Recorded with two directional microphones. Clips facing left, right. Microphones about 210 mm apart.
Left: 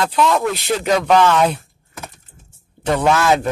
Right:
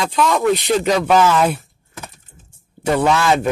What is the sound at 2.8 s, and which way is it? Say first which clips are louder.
Speech: even; 10° right (ahead or behind).